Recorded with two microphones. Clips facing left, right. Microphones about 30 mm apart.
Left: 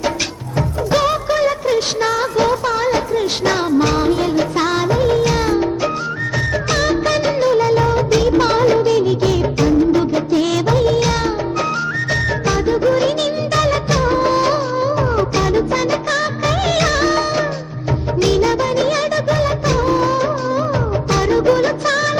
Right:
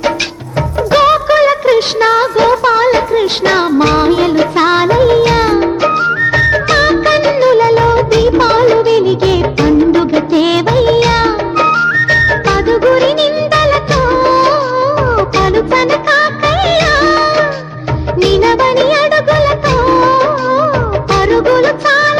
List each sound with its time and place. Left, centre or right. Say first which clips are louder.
0.9 s music: right 8 dB; right
6.3 s music of bollywood: right 9 dB; right